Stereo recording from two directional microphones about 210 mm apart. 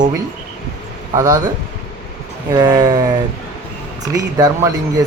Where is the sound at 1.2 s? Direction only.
15° right (ahead or behind).